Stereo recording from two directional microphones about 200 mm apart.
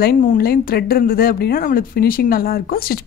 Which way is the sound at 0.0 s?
45° left (ahead or behind).